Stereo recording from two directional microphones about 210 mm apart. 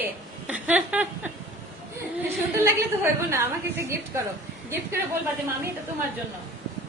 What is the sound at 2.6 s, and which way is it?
A woman's voice, 10° right (ahead or behind).